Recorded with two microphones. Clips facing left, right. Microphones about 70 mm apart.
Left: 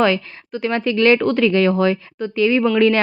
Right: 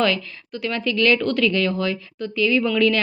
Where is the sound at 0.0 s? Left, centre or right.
Left.